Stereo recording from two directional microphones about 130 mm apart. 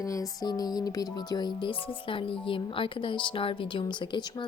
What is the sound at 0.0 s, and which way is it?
Speech, 25° left (ahead or behind).